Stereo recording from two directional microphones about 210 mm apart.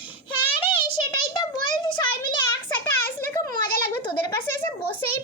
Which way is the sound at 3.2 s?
10° left (ahead or behind).